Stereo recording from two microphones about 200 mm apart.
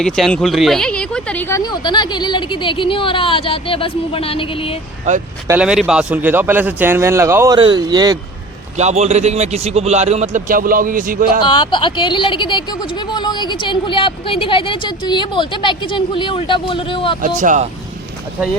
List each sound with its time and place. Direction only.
0.0 s speech: 5° left (ahead or behind); by 4.8 s 25° left (ahead or behind)
5.5 s a man's voice: 5° right (ahead or behind)
8.8 s a man's voice: 35° right (ahead or behind)
11.4 s speech: 20° left (ahead or behind)
17.2 s a man's voice: 40° right (ahead or behind)